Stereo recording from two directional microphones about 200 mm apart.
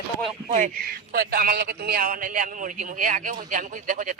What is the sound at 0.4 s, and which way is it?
A man's voice, 40° right (ahead or behind).